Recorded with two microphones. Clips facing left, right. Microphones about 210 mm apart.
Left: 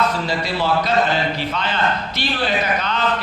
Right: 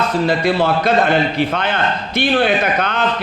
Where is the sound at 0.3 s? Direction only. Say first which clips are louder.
Right 6 dB; 55° right (ahead or behind).